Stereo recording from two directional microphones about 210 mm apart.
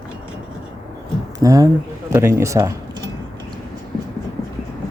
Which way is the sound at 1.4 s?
15° right (ahead or behind).